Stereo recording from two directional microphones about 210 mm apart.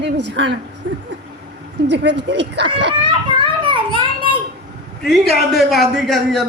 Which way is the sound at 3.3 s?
25° right (ahead or behind).